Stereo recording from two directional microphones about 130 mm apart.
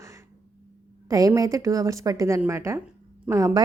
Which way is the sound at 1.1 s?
25° right (ahead or behind).